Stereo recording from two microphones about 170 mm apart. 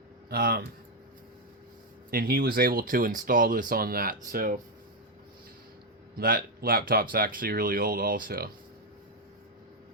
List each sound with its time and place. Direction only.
0.3 s speech: 65° right (ahead or behind)
2.0 s speech: 60° right (ahead or behind)
6.1 s speech: 60° right (ahead or behind)